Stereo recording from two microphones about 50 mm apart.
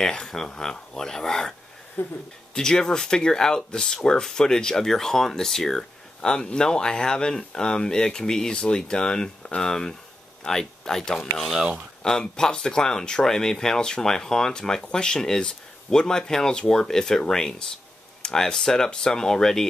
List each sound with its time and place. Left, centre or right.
0.1 s speech: centre
2.0 s speech: left
2.5 s speech: centre
11.5 s speech: centre
12.0 s speech: centre